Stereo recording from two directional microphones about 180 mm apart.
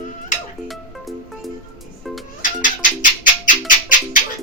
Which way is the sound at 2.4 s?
45° left (ahead or behind).